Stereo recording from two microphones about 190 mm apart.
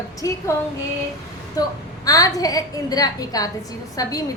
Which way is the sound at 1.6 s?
20° left (ahead or behind).